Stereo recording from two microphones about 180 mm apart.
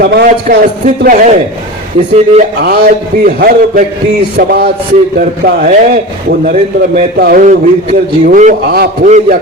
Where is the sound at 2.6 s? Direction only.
55° right (ahead or behind).